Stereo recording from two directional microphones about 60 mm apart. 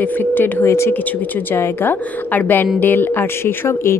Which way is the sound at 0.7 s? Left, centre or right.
Left.